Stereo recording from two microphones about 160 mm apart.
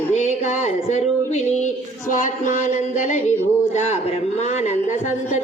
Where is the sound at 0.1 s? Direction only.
45° left (ahead or behind).